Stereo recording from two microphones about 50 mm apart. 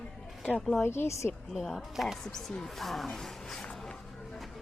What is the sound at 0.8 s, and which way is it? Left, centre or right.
Speech, left.